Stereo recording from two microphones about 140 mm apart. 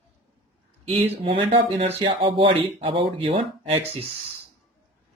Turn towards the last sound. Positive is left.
turn(degrees=-45)  # may be behind; listen again after turning